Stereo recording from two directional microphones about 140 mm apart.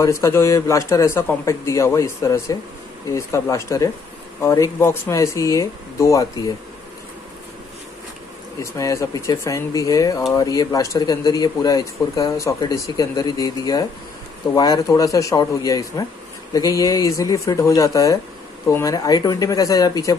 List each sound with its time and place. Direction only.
0.0 s speech: 20° left (ahead or behind)
8.7 s speech: 20° left (ahead or behind)